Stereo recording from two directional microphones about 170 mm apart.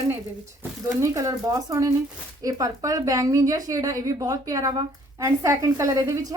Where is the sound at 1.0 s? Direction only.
20° right (ahead or behind).